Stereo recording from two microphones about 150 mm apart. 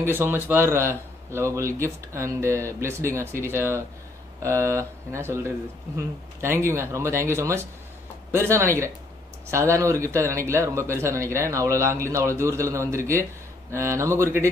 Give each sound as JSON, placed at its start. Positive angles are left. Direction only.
{"t": 0.0, "sound": "a man's voice", "side_deg": -15}